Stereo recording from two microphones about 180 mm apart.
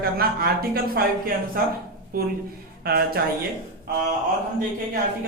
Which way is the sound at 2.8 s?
55° right (ahead or behind).